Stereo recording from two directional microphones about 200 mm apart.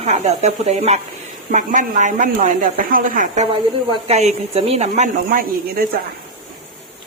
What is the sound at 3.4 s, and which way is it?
Speech, 30° right (ahead or behind).